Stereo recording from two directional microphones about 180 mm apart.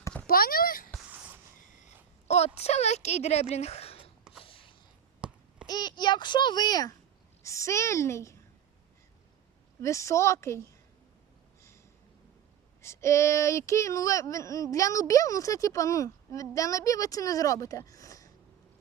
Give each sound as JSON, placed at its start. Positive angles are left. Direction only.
{"t": 0.3, "sound": "speech", "side_deg": 55}
{"t": 1.5, "sound": "a sound", "side_deg": 40}
{"t": 2.6, "sound": "speech", "side_deg": 35}
{"t": 3.5, "sound": "a sound", "side_deg": 35}
{"t": 5.2, "sound": "babbling", "side_deg": -5}
{"t": 5.6, "sound": "a child's voice", "side_deg": 25}
{"t": 9.8, "sound": "speech", "side_deg": 15}
{"t": 12.8, "sound": "speech", "side_deg": 15}